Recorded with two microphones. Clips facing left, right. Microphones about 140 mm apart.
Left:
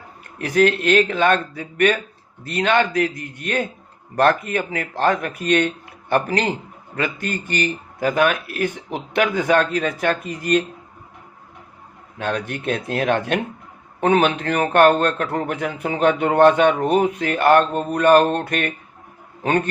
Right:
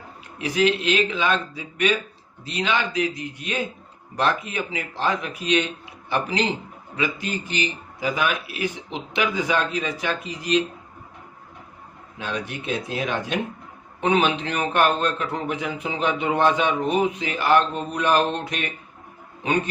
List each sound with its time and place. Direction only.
0.3 s a man's voice: 55° left (ahead or behind)
12.1 s a man's voice: 55° left (ahead or behind)